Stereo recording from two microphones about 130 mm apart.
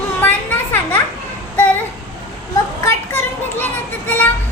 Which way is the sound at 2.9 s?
20° left (ahead or behind).